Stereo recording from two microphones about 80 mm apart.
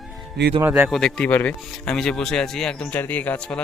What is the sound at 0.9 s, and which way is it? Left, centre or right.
Speech, centre.